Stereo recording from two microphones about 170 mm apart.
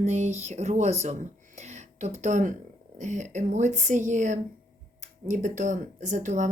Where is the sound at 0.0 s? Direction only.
45° right (ahead or behind).